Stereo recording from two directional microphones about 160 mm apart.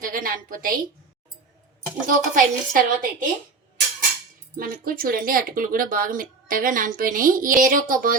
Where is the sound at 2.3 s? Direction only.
60° right (ahead or behind).